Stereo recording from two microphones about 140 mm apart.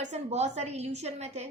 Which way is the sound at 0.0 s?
55° right (ahead or behind).